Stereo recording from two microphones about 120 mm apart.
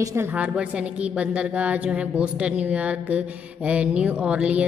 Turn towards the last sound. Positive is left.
turn(degrees=-10)  # may be behind; listen again after turning